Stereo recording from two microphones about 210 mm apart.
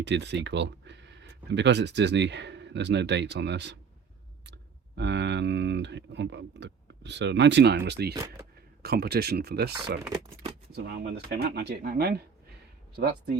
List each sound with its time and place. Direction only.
0.0 s speech: 55° right (ahead or behind)
8.1 s speech: 15° right (ahead or behind)
8.8 s speech: 50° right (ahead or behind)
10.8 s speech: 50° right (ahead or behind)